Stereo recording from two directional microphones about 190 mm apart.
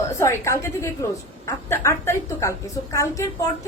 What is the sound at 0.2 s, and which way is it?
A woman's voice, 15° left (ahead or behind).